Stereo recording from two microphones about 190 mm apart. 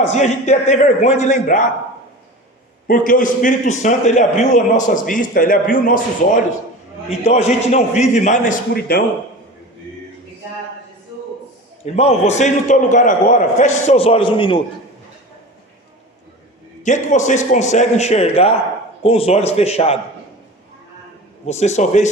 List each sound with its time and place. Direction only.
0.1 s a man's voice: 40° left (ahead or behind)
2.8 s a man's voice: 45° left (ahead or behind)
8.9 s a man's voice: 55° left (ahead or behind)
11.9 s a man's voice: 35° left (ahead or behind)
16.8 s a man's voice: 40° left (ahead or behind)
21.4 s a man's voice: 35° left (ahead or behind)